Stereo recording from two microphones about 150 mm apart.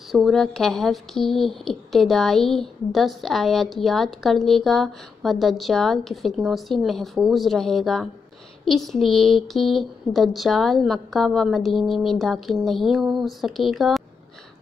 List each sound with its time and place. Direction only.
0.1 s a woman's voice: centre (ahead or behind)